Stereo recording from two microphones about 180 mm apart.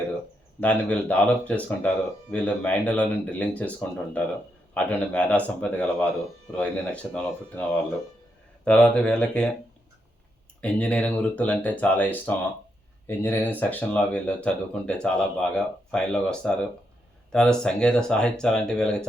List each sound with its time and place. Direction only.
0.6 s speech: 10° left (ahead or behind)
10.6 s speech: 5° left (ahead or behind)